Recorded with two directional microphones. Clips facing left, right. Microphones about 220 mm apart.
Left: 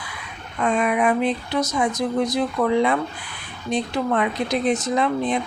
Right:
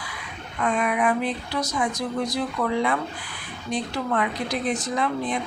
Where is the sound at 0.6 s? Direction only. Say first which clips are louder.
Left 3 dB; 25° left (ahead or behind).